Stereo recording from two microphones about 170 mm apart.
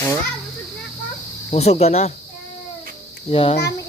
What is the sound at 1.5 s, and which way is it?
Speech, 40° left (ahead or behind).